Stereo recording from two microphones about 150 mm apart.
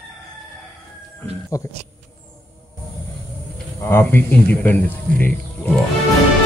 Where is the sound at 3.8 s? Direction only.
15° left (ahead or behind).